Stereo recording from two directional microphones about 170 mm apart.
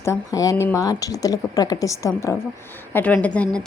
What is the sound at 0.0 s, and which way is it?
A woman's voice, 15° left (ahead or behind).